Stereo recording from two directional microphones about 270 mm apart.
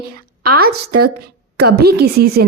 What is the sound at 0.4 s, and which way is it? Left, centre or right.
Speech, right.